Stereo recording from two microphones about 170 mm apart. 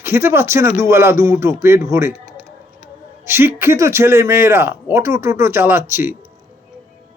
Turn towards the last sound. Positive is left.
turn(degrees=-15)  # may be behind; listen again after turning